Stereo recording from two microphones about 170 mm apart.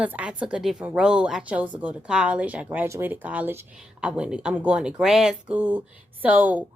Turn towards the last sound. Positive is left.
turn(degrees=-10)  # may be behind; listen again after turning